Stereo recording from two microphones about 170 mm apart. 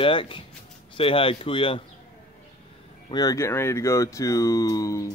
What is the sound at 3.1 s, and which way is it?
Speech, 20° left (ahead or behind).